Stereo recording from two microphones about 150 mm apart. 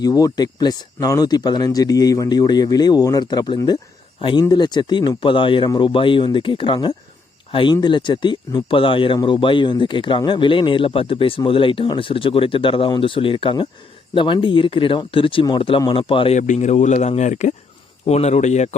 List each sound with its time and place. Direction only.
0.0 s speech: 25° left (ahead or behind)
16.4 s speech: 55° left (ahead or behind)